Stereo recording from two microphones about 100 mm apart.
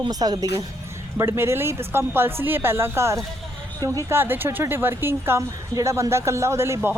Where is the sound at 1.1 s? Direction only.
25° right (ahead or behind).